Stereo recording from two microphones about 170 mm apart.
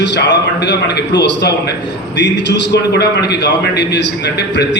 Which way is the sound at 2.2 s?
90° left.